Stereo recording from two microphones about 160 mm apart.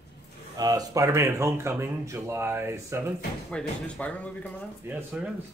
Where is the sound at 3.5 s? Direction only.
5° left (ahead or behind).